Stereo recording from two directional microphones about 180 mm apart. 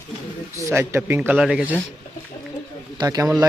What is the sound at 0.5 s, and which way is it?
A man's voice, 15° right (ahead or behind).